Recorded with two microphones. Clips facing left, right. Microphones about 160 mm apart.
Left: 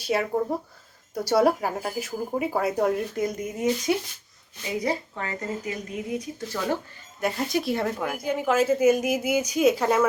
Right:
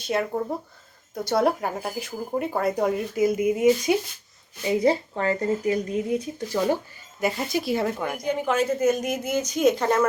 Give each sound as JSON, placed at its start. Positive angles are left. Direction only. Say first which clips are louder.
{"t": 0.0, "sound": "speech", "louder": "left 1 dB", "side_deg": 5}
{"t": 4.7, "sound": "speech", "louder": "right 6 dB", "side_deg": -30}
{"t": 7.2, "sound": "speech", "louder": "even", "side_deg": 0}